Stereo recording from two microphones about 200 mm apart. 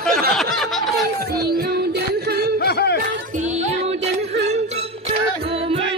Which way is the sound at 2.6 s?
55° left (ahead or behind).